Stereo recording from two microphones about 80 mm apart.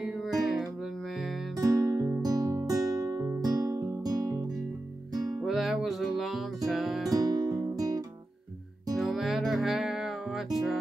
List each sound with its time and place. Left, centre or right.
0.0 s music: centre
1.6 s music: right
3.3 s music: right
5.4 s music: centre
7.1 s music: right
8.9 s music: centre